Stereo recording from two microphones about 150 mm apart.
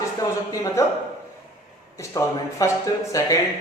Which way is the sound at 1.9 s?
20° left (ahead or behind).